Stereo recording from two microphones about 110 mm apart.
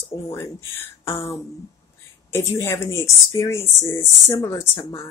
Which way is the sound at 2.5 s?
25° left (ahead or behind).